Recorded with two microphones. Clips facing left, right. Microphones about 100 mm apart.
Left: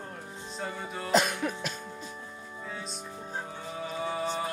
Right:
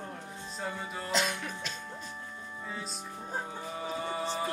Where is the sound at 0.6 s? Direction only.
Centre (ahead or behind).